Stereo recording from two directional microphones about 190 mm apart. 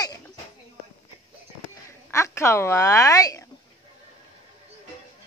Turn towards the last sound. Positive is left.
turn(degrees=15)  # may be behind; listen again after turning